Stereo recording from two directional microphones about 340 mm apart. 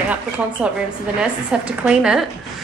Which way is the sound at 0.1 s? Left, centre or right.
Centre.